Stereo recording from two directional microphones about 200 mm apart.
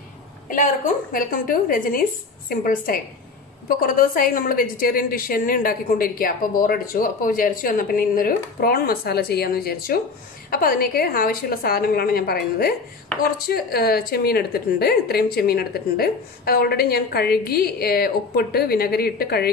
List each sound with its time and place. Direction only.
0.5 s a woman's voice: 40° left (ahead or behind)